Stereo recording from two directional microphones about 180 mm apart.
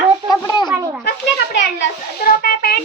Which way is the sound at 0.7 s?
10° right (ahead or behind).